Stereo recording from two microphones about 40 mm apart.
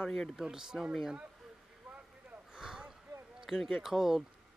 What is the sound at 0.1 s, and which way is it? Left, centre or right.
Speech, centre.